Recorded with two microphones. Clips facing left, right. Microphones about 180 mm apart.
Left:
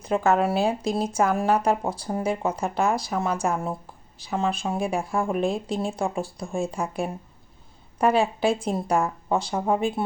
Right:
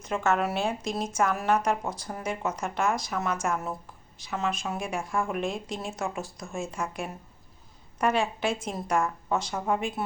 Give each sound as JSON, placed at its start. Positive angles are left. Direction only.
{"t": 0.0, "sound": "speech", "side_deg": 35}